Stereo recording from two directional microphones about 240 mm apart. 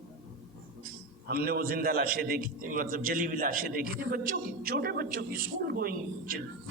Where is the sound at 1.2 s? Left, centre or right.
Right.